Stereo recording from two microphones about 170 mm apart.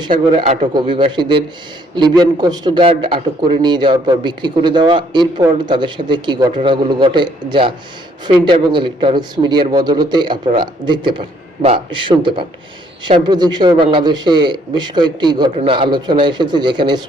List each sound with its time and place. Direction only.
0.3 s a man's voice: 40° right (ahead or behind)
0.7 s a man's voice: 25° right (ahead or behind)